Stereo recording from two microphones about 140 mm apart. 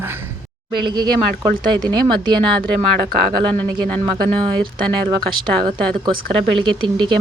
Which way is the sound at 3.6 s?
10° left (ahead or behind).